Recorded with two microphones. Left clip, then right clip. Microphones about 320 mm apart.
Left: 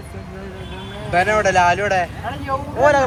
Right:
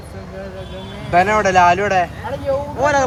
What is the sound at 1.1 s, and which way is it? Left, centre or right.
Speech, right.